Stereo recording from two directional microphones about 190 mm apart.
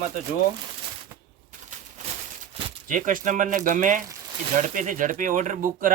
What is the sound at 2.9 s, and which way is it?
Speech, 45° right (ahead or behind).